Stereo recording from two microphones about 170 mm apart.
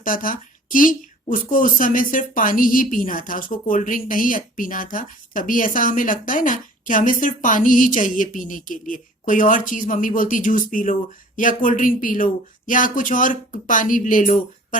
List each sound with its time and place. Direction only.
0.0 s a woman's voice: 55° left (ahead or behind)